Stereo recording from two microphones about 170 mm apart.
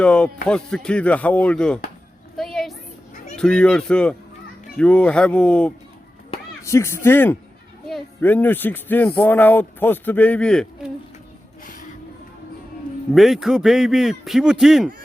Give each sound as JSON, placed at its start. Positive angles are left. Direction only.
{"t": 0.0, "sound": "speech", "side_deg": 5}
{"t": 2.3, "sound": "a sound", "side_deg": 0}
{"t": 3.3, "sound": "speech", "side_deg": 5}
{"t": 6.7, "sound": "speech", "side_deg": 15}
{"t": 11.6, "sound": "music", "side_deg": 50}
{"t": 13.1, "sound": "speech", "side_deg": 0}